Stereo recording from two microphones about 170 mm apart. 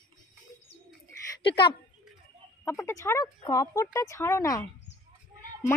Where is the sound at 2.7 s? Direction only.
15° left (ahead or behind).